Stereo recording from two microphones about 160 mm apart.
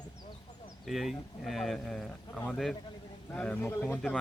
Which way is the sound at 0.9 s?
Centre (ahead or behind).